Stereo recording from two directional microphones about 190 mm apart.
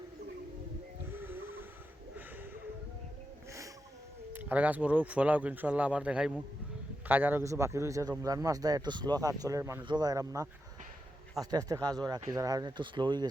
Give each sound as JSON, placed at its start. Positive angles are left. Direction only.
{"t": 1.1, "sound": "wheeze", "side_deg": -10}
{"t": 2.1, "sound": "a sound", "side_deg": -10}
{"t": 4.3, "sound": "speech", "side_deg": -10}